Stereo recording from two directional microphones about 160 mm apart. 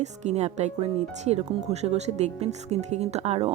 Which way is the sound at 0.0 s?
45° right (ahead or behind).